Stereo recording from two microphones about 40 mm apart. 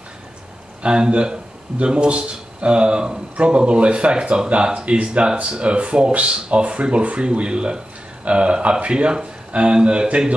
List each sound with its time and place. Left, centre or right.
0.8 s speech: right